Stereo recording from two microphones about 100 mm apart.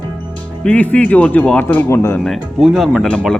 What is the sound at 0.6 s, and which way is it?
Speech, 15° left (ahead or behind).